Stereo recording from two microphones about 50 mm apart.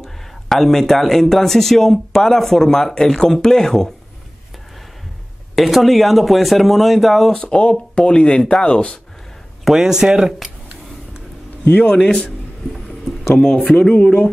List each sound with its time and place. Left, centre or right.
0.0 s speech: centre
5.6 s speech: centre
7.4 s speech: left
9.7 s speech: centre
11.7 s speech: centre
13.4 s speech: centre